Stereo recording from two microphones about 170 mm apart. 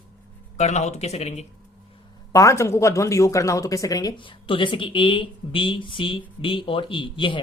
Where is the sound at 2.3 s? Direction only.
20° left (ahead or behind).